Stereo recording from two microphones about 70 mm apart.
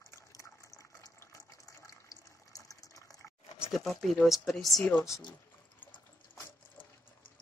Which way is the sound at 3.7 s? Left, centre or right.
Centre.